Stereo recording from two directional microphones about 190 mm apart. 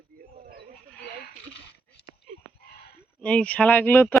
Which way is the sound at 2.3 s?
35° right (ahead or behind).